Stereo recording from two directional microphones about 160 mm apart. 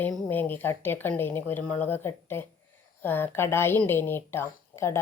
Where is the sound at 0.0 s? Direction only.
10° left (ahead or behind).